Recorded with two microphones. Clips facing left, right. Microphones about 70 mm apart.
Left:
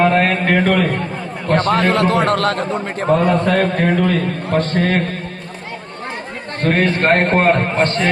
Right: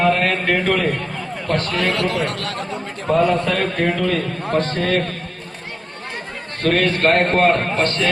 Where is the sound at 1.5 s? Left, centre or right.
Left.